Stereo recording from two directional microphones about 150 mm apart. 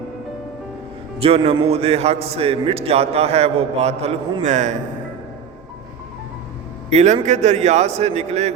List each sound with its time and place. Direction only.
1.2 s a man's voice: 40° right (ahead or behind)
4.4 s speech: 55° right (ahead or behind)
6.9 s a man's voice: 50° right (ahead or behind)